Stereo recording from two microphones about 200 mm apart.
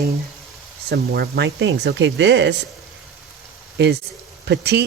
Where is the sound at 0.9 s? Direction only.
55° right (ahead or behind).